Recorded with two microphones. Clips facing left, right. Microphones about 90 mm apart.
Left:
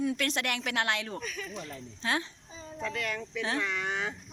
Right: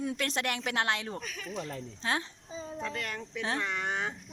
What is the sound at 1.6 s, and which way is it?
Speech, 30° right (ahead or behind).